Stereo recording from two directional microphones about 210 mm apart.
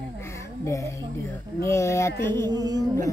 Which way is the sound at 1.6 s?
15° left (ahead or behind).